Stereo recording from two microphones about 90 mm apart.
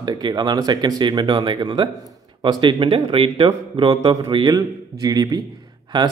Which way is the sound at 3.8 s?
75° right (ahead or behind).